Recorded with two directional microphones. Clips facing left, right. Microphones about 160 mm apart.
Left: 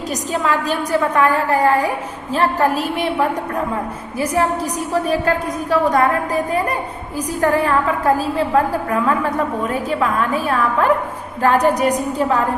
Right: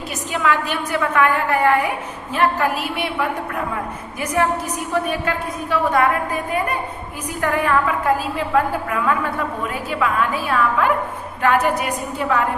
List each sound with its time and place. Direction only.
0.3 s a woman's voice: 35° left (ahead or behind)
5.0 s a woman's voice: 35° left (ahead or behind)